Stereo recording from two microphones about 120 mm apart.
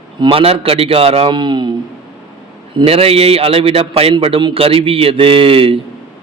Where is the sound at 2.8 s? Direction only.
55° right (ahead or behind).